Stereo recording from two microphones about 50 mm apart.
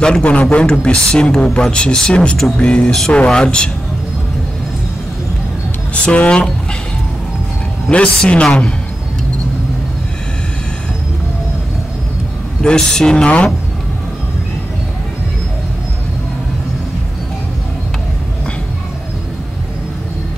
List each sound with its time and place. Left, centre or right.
0.0 s speech: centre
5.9 s speech: left
7.9 s speech: left
12.6 s speech: centre